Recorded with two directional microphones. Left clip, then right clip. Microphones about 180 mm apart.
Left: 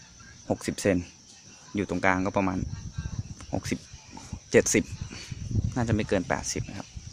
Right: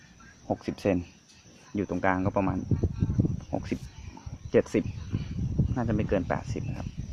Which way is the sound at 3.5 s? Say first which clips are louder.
Left 1 dB; centre (ahead or behind).